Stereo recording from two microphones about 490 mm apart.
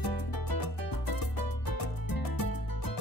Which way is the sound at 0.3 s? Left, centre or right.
Left.